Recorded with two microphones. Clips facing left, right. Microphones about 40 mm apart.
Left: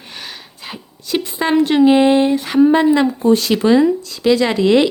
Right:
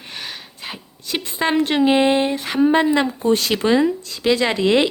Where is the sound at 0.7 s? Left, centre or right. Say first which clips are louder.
Left 6 dB; right.